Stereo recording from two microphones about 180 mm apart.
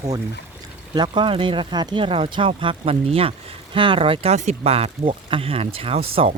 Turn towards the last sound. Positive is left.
turn(degrees=-30)  # may be behind; listen again after turning